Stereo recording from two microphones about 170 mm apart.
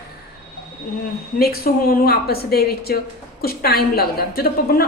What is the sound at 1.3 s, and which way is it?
A woman's voice, 60° left (ahead or behind).